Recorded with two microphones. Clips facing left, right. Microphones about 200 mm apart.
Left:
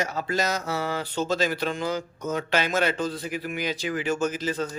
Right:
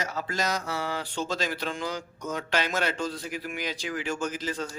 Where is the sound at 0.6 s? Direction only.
25° left (ahead or behind).